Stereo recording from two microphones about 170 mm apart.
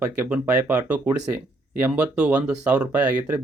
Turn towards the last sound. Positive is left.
turn(degrees=-5)  # may be behind; listen again after turning